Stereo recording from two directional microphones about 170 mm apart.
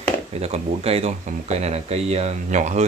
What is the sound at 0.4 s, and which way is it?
Speech, 40° right (ahead or behind).